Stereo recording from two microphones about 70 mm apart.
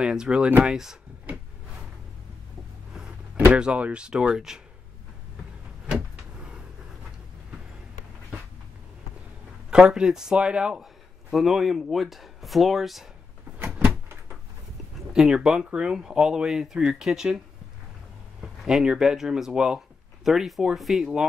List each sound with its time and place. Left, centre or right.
0.0 s speech: centre
3.5 s speech: centre
9.7 s a man's voice: centre
13.6 s a sound: right
15.1 s speech: centre
18.6 s speech: centre